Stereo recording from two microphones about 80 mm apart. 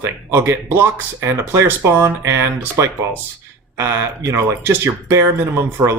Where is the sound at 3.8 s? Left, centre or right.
Right.